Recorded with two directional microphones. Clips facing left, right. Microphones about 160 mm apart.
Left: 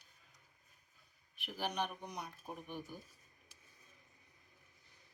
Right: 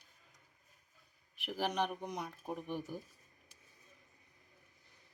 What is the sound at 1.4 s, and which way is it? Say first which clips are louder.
Speech: right 4 dB; 90° right.